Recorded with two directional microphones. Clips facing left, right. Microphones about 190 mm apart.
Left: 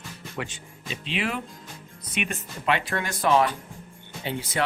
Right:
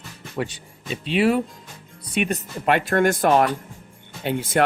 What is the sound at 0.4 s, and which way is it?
Speech, 35° right (ahead or behind).